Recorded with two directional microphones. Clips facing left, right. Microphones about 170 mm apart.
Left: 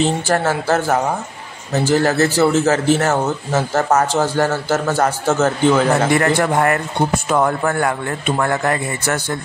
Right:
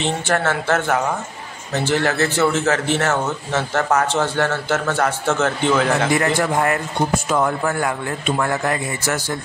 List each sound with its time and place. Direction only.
0.0 s a man's voice: 35° left (ahead or behind)
6.1 s speech: 55° left (ahead or behind)